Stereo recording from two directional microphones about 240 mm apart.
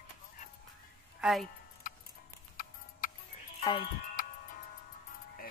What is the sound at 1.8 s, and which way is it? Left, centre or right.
Music, left.